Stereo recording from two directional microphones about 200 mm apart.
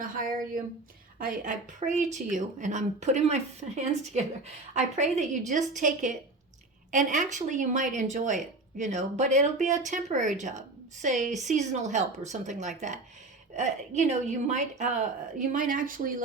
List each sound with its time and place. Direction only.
0.0 s a woman's voice: 45° right (ahead or behind)